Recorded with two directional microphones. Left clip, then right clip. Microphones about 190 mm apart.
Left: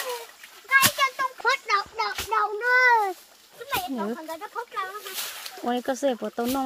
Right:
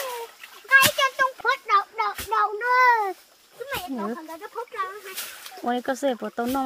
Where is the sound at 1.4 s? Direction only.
5° right (ahead or behind).